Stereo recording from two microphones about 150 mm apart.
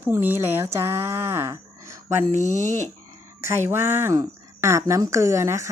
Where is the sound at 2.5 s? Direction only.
50° right (ahead or behind).